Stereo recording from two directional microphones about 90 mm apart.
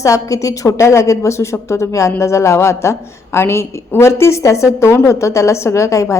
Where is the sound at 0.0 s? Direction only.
35° left (ahead or behind).